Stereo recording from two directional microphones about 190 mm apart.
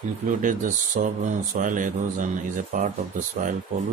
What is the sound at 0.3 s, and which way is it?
Speech, 45° right (ahead or behind).